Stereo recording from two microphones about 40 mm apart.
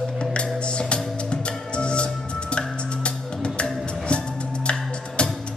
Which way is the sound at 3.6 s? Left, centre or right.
Left.